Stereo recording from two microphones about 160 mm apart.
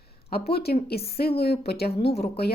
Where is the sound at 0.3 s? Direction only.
80° left.